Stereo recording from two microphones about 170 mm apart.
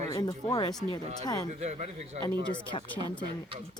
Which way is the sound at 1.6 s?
40° right (ahead or behind).